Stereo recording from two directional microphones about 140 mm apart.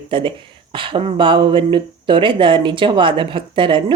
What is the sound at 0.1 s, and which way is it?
Speech, 35° right (ahead or behind).